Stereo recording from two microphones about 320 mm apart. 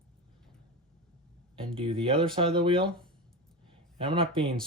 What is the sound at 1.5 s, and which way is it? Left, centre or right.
Speech, centre.